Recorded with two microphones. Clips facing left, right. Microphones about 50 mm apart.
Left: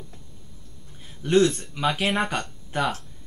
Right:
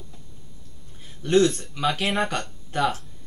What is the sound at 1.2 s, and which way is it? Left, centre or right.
Speech, centre.